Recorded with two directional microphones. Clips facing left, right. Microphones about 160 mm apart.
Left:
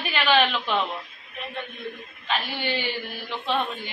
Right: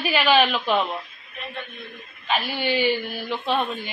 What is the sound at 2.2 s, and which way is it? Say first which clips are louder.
A woman's voice: right 3 dB; 10° right (ahead or behind).